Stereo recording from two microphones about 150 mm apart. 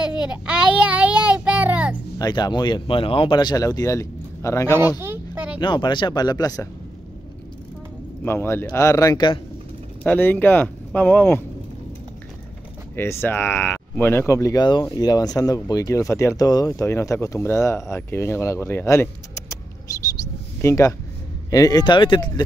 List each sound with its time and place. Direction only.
0.0 s child singing: 5° right (ahead or behind)
2.1 s speech: 25° left (ahead or behind)
5.0 s a sound: 15° right (ahead or behind)
5.6 s speech: 30° left (ahead or behind)
8.2 s speech: 15° left (ahead or behind)
10.0 s speech: 15° left (ahead or behind)
12.9 s speech: 15° left (ahead or behind)
20.6 s speech: 20° left (ahead or behind)